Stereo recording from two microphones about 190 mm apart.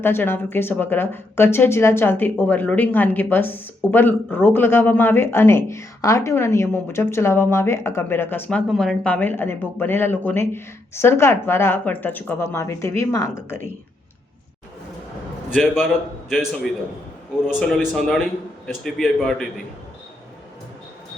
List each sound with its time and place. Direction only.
0.0 s speech: 10° left (ahead or behind)
15.4 s a man's voice: centre (ahead or behind)
17.5 s a man's voice: centre (ahead or behind)